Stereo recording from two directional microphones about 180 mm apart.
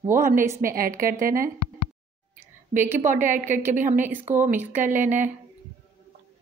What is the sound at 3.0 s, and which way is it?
A woman's voice, 45° right (ahead or behind).